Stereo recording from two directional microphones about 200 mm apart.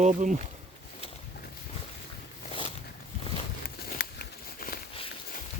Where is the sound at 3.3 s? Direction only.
30° left (ahead or behind).